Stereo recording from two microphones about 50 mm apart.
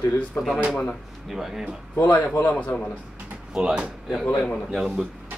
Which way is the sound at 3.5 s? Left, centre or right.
Centre.